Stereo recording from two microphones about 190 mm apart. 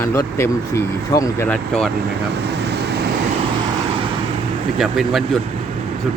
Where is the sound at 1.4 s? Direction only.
5° left (ahead or behind).